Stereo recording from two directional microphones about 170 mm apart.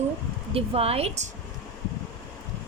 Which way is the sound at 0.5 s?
35° right (ahead or behind).